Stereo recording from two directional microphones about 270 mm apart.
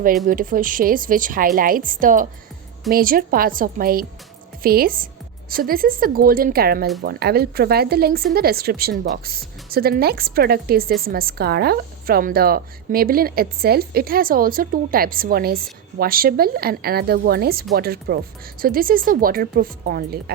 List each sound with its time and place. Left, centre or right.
0.3 s speech: right